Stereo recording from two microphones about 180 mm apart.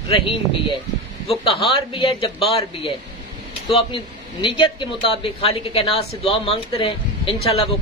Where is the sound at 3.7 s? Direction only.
30° left (ahead or behind).